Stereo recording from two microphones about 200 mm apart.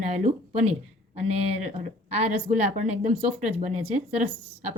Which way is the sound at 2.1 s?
30° right (ahead or behind).